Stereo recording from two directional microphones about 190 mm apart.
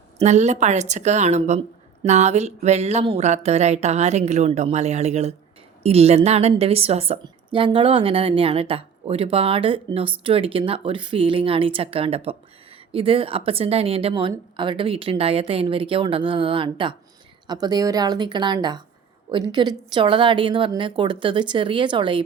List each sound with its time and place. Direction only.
0.2 s a woman's voice: 35° right (ahead or behind)